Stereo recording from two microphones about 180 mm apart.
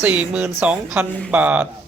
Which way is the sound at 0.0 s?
10° right (ahead or behind).